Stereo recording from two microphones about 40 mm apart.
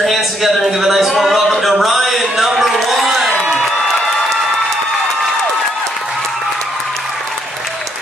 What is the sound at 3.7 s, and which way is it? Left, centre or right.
Music, centre.